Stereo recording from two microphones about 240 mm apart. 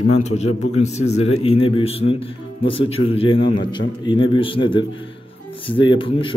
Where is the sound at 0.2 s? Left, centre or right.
Left.